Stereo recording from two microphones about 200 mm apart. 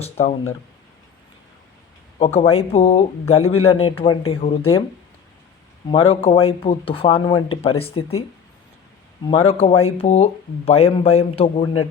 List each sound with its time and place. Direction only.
0.0 s speech: 30° left (ahead or behind)
2.1 s speech: 30° left (ahead or behind)
5.9 s speech: 25° left (ahead or behind)
9.5 s speech: 30° left (ahead or behind)